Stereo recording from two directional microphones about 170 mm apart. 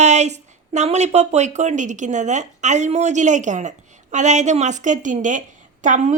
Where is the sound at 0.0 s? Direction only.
40° right (ahead or behind).